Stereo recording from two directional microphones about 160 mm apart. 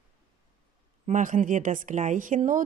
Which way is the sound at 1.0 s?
50° right (ahead or behind).